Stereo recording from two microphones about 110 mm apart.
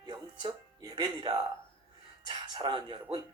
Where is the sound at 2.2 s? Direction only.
45° right (ahead or behind).